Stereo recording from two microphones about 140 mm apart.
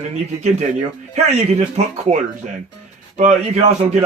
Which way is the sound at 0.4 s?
55° right (ahead or behind).